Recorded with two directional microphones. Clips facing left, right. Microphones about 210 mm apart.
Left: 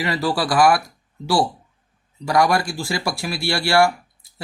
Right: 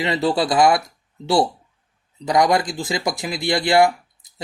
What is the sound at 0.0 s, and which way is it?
Speech, 20° right (ahead or behind).